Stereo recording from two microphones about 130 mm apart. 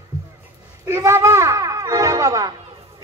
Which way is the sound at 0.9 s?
25° right (ahead or behind).